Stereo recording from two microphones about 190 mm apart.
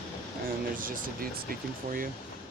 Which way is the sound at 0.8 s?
50° right (ahead or behind).